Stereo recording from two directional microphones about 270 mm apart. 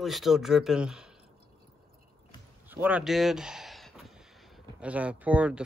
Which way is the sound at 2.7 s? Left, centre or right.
Centre.